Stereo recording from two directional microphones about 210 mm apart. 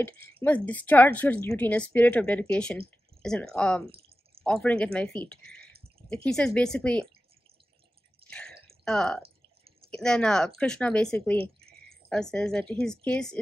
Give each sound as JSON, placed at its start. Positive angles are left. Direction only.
{"t": 0.0, "sound": "a woman's voice", "side_deg": 10}
{"t": 8.3, "sound": "drip", "side_deg": 5}
{"t": 8.6, "sound": "a sound", "side_deg": 5}
{"t": 9.8, "sound": "a woman's voice", "side_deg": 5}